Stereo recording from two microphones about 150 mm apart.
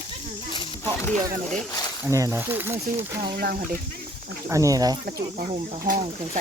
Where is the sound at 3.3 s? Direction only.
90° right.